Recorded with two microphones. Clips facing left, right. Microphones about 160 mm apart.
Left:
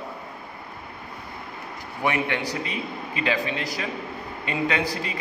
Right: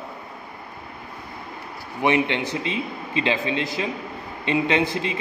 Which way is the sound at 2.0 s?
20° right (ahead or behind).